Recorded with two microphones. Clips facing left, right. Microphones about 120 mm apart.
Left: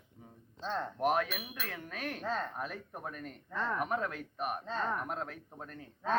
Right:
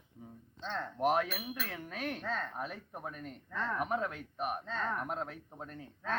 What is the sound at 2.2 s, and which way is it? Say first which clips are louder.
Speech: left 6 dB; 20° left (ahead or behind).